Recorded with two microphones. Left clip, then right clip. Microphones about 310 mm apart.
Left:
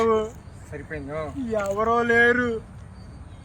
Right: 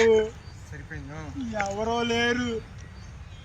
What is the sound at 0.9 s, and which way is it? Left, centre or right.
Speech, left.